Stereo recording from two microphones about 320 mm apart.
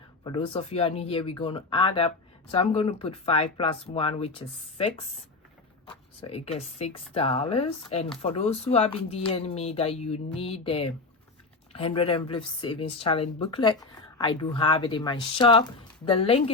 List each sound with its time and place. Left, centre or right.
0.3 s speech: centre